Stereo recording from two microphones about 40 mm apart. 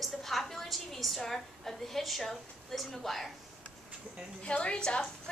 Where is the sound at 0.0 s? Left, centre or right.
Centre.